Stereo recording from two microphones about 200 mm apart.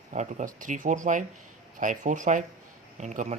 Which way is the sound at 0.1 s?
40° right (ahead or behind).